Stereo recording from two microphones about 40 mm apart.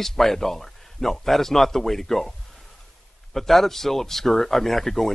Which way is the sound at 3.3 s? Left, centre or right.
Centre.